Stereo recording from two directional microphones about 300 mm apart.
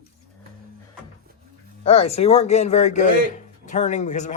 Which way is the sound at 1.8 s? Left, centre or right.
Left.